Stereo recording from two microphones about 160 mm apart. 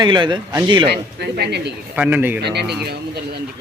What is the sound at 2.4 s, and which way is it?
Speech, 90° right.